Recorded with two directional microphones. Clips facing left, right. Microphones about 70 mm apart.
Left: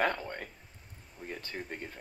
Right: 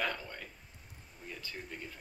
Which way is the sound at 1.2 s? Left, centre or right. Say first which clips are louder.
Left 5 dB; left.